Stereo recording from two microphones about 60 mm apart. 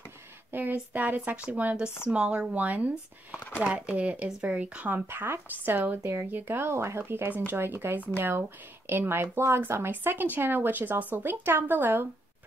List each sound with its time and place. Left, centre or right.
0.5 s speech: right
4.9 s speech: right
7.5 s speech: right
11.4 s speech: right